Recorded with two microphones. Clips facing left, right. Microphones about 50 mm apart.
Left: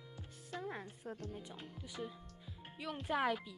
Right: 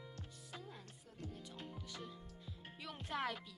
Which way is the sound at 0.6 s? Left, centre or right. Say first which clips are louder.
Left 11 dB; left.